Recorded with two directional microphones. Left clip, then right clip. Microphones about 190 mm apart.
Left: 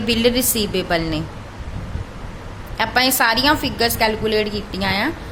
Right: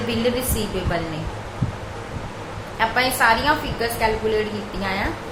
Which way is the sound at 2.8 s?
60° left (ahead or behind).